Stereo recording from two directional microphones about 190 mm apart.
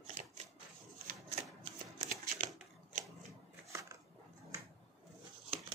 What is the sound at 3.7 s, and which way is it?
Biting, 15° right (ahead or behind).